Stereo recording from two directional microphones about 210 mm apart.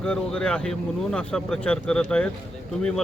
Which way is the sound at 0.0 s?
5° left (ahead or behind).